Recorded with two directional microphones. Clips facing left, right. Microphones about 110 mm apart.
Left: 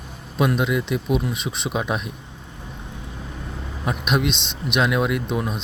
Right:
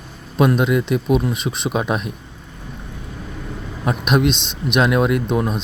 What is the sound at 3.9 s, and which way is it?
A man's voice, 45° right (ahead or behind).